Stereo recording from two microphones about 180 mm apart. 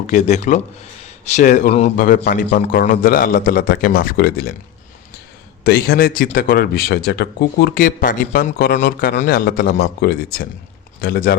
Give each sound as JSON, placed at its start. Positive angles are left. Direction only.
{"t": 0.1, "sound": "speech", "side_deg": 40}
{"t": 2.0, "sound": "speech", "side_deg": 60}
{"t": 2.7, "sound": "a man's voice", "side_deg": 50}
{"t": 5.6, "sound": "speech", "side_deg": 60}